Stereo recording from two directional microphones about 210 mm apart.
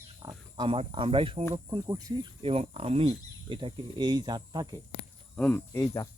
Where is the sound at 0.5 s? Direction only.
25° right (ahead or behind).